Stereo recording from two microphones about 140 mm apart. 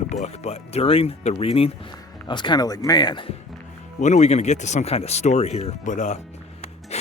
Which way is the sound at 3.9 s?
55° left (ahead or behind).